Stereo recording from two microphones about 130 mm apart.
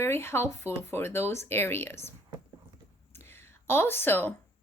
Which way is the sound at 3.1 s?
20° left (ahead or behind).